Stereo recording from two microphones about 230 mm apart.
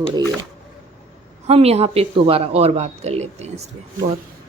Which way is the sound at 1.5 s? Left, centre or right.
Right.